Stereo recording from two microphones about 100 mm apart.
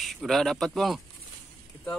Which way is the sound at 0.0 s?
Centre (ahead or behind).